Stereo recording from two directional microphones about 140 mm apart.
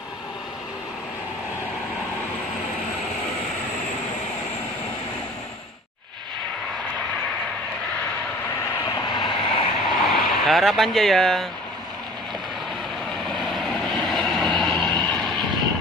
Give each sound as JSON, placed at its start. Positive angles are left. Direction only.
{"t": 8.8, "sound": "vehicle", "side_deg": 30}
{"t": 10.0, "sound": "speech", "side_deg": 0}
{"t": 13.4, "sound": "vehicle", "side_deg": 0}